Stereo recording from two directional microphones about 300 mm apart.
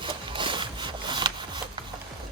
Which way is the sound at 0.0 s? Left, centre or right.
Centre.